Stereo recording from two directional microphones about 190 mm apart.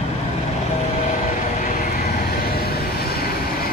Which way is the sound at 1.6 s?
50° left (ahead or behind).